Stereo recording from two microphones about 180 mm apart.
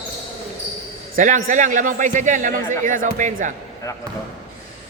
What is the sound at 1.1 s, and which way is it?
A man's voice, 50° right (ahead or behind).